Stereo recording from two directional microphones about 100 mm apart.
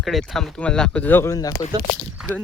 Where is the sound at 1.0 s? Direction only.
20° left (ahead or behind).